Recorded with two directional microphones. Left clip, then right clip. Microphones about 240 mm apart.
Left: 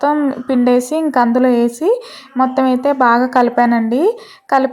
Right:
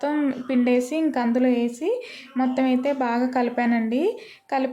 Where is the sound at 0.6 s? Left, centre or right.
Centre.